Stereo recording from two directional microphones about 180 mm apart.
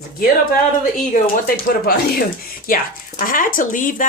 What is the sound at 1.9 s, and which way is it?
Speech, 55° left (ahead or behind).